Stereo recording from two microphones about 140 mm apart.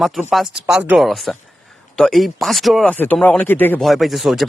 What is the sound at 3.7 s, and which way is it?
Speech, centre (ahead or behind).